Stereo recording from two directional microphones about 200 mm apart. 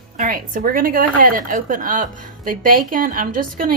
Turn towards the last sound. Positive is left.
turn(degrees=-45)  # may be behind; listen again after turning